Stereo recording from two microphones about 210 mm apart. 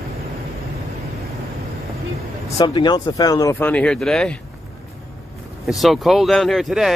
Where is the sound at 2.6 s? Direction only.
20° left (ahead or behind); by 4.4 s 5° left (ahead or behind).